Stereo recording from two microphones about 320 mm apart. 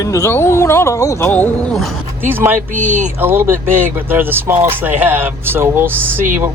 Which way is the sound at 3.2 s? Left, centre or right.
Centre.